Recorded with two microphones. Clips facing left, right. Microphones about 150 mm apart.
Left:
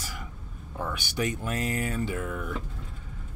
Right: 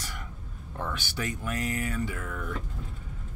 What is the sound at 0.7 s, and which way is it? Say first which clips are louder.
Speech: left 3 dB; 10° left (ahead or behind).